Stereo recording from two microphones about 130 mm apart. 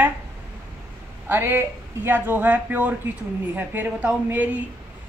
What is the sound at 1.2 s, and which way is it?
Speech, 15° right (ahead or behind).